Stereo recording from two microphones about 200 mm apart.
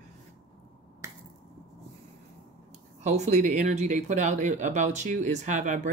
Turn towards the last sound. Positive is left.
turn(degrees=-40)  # may be behind; listen again after turning